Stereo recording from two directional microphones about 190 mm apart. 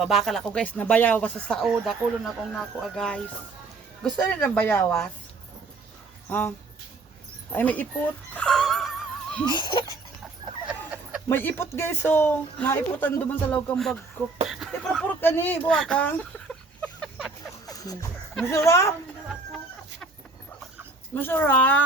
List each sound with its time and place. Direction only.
0.0 s speech: centre (ahead or behind)
7.5 s speech: 10° left (ahead or behind)
8.4 s music: 5° left (ahead or behind)
9.5 s a sound: 25° left (ahead or behind)
10.7 s chicken: 5° right (ahead or behind)
11.3 s speech: 10° left (ahead or behind)
14.4 s a sound: centre (ahead or behind)
15.2 s a sound: 10° left (ahead or behind)
17.7 s music: 20° left (ahead or behind)
18.5 s speech: 15° left (ahead or behind)
21.2 s speech: 10° left (ahead or behind)